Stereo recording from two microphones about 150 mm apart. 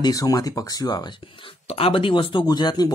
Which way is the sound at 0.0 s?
25° left (ahead or behind).